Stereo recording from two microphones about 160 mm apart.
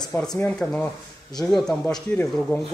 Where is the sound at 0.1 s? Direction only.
10° left (ahead or behind).